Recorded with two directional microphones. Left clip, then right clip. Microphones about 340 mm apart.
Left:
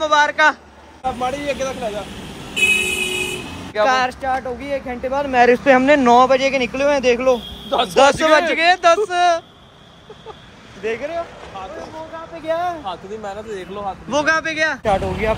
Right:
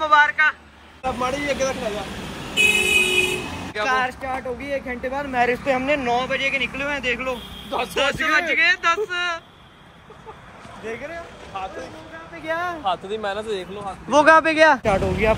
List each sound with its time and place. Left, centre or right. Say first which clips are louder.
0.0 s a man's voice: left 2 dB; centre
1.0 s speech: left 2 dB; centre
3.7 s speech: left 5 dB; left
5.3 s speech: left 9 dB; left
5.9 s speech: left 10 dB; left
6.2 s speech: left 7 dB; centre
10.9 s speech: left 8 dB; centre
12.4 s speech: left 4 dB; centre
12.8 s speech: right 4 dB; right
13.7 s speech: right 2 dB; centre
14.2 s speech: right 5 dB; centre